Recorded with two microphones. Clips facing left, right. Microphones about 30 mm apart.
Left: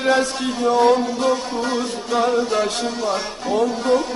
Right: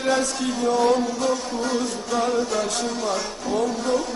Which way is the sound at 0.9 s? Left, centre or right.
Left.